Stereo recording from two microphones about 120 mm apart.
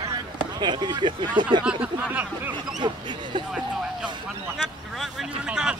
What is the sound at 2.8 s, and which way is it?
Speech, 40° right (ahead or behind).